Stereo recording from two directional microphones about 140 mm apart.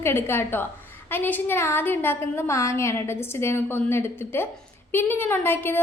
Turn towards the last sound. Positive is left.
turn(degrees=15)  # may be behind; listen again after turning